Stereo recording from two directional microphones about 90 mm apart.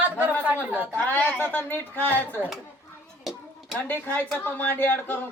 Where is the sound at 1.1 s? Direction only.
20° left (ahead or behind).